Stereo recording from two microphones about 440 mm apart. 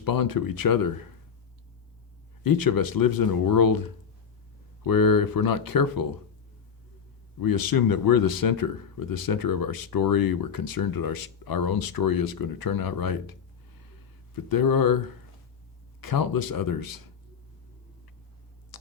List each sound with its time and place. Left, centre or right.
0.0 s speech: left
2.4 s speech: left
7.4 s speech: left
14.3 s speech: left
18.7 s a sound: left